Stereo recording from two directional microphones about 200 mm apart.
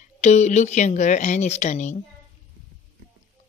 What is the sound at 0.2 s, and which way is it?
Speech, 35° left (ahead or behind).